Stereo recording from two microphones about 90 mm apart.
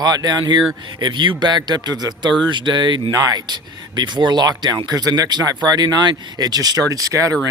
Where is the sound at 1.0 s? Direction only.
60° right (ahead or behind).